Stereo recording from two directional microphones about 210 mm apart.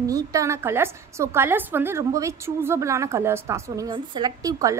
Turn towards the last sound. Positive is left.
turn(degrees=-15)  # may be behind; listen again after turning